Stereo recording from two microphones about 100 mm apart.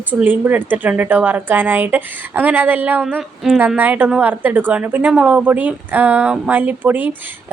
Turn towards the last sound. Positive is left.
turn(degrees=-15)  # may be behind; listen again after turning